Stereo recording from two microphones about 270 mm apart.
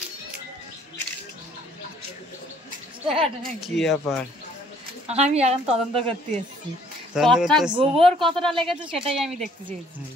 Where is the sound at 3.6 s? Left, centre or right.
Centre.